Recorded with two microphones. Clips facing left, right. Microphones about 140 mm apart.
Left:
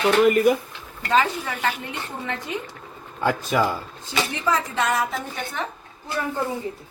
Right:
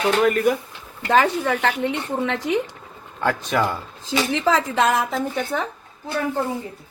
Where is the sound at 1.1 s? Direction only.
60° right (ahead or behind); by 2.6 s 80° right.